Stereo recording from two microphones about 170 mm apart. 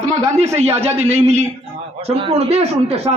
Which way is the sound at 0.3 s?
40° right (ahead or behind).